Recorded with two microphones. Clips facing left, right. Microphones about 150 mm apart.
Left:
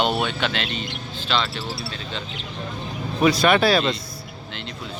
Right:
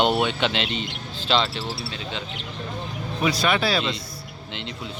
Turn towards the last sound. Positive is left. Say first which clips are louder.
# left 5 dB
turn(degrees=50)  # may be behind; listen again after turning